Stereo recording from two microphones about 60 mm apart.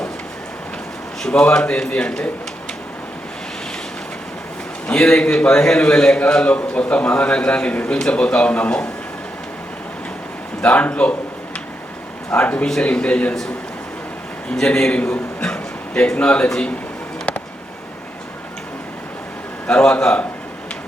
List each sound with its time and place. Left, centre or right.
1.3 s a man's voice: centre
4.9 s a man's voice: centre
10.6 s a man's voice: left
12.3 s a man's voice: left
14.5 s a man's voice: centre
19.6 s a man's voice: centre